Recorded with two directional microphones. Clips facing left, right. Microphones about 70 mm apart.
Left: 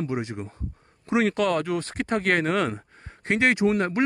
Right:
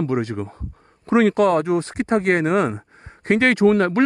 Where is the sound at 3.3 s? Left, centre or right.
Right.